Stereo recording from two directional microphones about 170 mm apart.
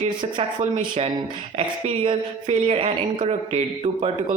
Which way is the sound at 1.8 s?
35° right (ahead or behind).